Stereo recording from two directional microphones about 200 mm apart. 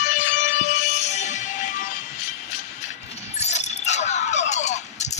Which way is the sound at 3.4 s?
35° left (ahead or behind).